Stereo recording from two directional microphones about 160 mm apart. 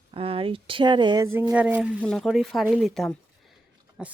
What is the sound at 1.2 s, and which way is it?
Speech, 15° right (ahead or behind).